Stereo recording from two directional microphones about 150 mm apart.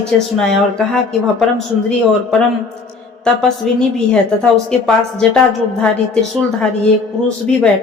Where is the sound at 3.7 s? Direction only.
5° left (ahead or behind).